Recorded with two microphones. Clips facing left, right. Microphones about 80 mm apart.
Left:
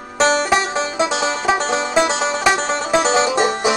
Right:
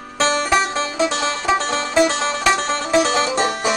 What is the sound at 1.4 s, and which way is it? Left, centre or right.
Music, centre.